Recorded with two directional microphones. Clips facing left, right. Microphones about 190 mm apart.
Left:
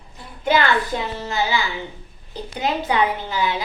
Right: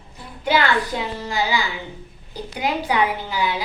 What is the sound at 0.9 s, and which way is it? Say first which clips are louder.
Speech: even; 15° right (ahead or behind).